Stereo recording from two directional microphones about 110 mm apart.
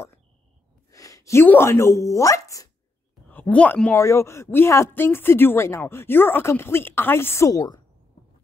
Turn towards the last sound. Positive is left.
turn(degrees=30)  # may be behind; listen again after turning